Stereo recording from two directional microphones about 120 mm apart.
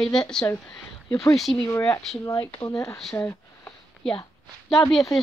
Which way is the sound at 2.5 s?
30° left (ahead or behind).